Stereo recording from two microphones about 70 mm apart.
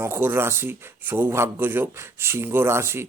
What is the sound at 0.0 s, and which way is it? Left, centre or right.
Speech, right.